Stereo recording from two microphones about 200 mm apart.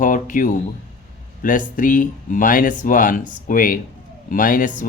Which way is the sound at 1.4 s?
40° left (ahead or behind).